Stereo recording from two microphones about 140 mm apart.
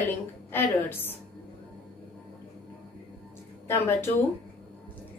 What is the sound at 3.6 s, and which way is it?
Speech, 15° left (ahead or behind).